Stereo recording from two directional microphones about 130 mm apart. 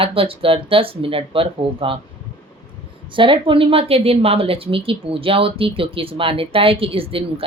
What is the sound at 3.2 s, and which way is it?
A woman's voice, 40° right (ahead or behind).